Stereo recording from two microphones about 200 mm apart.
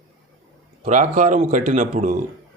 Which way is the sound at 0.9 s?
40° right (ahead or behind).